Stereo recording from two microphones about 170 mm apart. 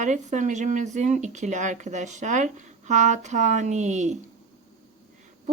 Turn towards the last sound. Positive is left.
turn(degrees=-45)  # may be behind; listen again after turning